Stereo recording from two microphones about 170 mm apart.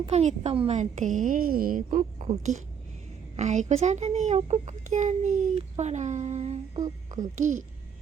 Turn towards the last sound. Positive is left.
turn(degrees=-50)  # may be behind; listen again after turning